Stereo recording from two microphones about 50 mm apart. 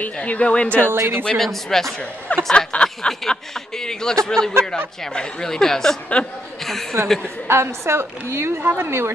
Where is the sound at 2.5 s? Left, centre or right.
Centre.